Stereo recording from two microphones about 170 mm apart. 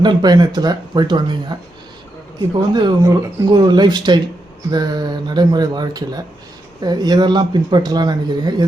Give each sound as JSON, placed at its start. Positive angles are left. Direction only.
{"t": 0.0, "sound": "speech", "side_deg": -25}
{"t": 2.6, "sound": "speech", "side_deg": -25}